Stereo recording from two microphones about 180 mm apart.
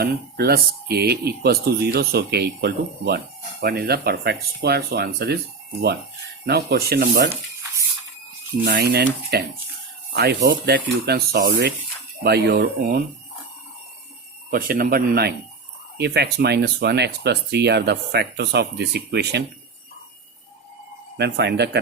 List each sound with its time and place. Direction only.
0.0 s speech: 60° right (ahead or behind)
6.4 s speech: 65° right (ahead or behind)
8.6 s speech: 65° right (ahead or behind)
14.5 s speech: 55° right (ahead or behind)
21.2 s speech: 70° right (ahead or behind)